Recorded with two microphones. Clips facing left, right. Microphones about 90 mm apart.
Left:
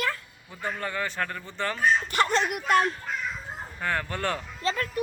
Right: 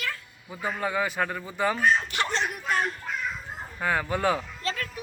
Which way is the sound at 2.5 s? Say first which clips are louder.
Left 5 dB; 70° left (ahead or behind).